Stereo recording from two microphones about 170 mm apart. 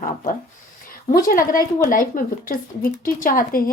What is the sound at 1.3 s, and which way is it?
Speech, 55° left (ahead or behind).